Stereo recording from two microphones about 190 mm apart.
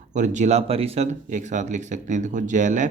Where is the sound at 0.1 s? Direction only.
40° right (ahead or behind).